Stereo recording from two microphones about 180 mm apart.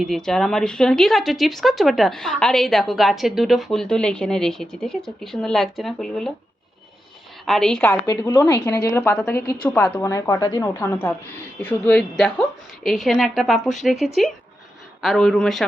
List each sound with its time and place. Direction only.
0.0 s a woman's voice: centre (ahead or behind)
7.4 s a woman's voice: centre (ahead or behind)
7.9 s a woman's voice: 20° left (ahead or behind); by 13.9 s centre (ahead or behind)
15.0 s a woman's voice: centre (ahead or behind)